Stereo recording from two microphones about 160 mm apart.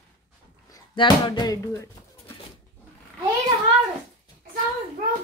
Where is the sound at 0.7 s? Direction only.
25° left (ahead or behind).